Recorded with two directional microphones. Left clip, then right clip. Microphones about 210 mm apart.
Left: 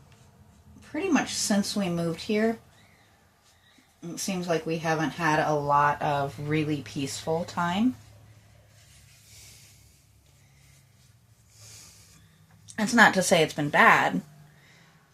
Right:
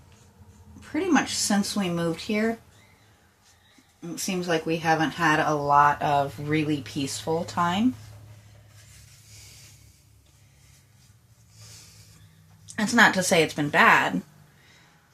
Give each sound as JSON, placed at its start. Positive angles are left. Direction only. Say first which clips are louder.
{"t": 0.8, "sound": "speech", "louder": "right 3 dB", "side_deg": 10}
{"t": 4.0, "sound": "speech", "louder": "right 2 dB", "side_deg": 10}
{"t": 12.6, "sound": "speech", "louder": "even", "side_deg": 15}